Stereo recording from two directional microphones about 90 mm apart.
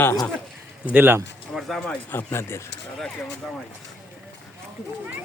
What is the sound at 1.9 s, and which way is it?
Speech, 20° left (ahead or behind).